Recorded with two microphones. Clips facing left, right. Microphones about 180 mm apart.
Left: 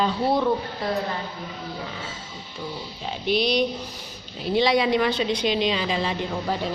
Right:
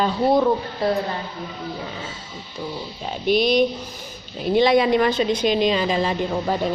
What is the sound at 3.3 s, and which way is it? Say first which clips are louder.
A woman's voice: right 4 dB; 50° right (ahead or behind).